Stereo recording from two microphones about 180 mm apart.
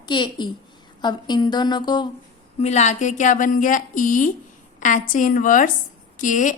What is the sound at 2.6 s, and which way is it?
A woman's voice, 40° left (ahead or behind).